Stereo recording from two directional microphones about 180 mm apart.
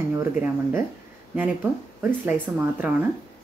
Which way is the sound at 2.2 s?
10° right (ahead or behind).